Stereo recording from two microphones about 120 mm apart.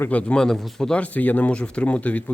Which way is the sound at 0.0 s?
10° left (ahead or behind).